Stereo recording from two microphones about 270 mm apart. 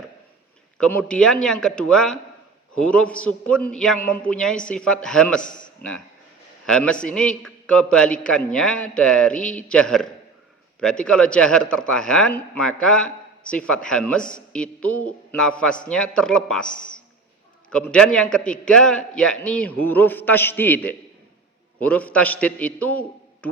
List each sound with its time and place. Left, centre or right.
0.8 s a man's voice: centre
6.7 s a man's voice: centre
16.6 s a man's voice: left
17.7 s a man's voice: centre